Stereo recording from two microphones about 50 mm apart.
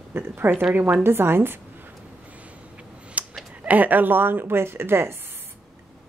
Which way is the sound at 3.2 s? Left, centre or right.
Right.